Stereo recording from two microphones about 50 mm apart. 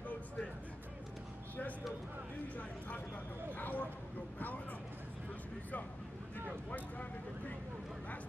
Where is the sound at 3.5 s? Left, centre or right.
Left.